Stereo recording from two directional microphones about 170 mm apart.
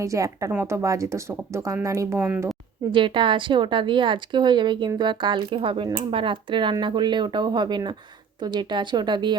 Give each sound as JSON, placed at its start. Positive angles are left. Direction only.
{"t": 0.0, "sound": "speech", "side_deg": -20}
{"t": 2.9, "sound": "speech", "side_deg": -30}